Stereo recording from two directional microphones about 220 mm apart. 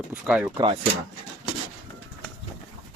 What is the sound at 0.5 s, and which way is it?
Speech, 25° right (ahead or behind).